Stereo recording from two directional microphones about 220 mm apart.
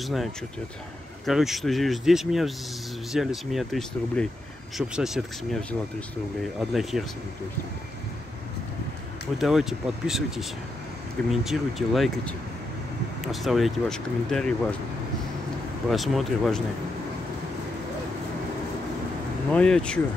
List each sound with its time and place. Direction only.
0.0 s speech: centre (ahead or behind)
9.4 s speech: centre (ahead or behind)
11.4 s speech: centre (ahead or behind)
15.9 s speech: centre (ahead or behind)
19.5 s speech: 5° left (ahead or behind)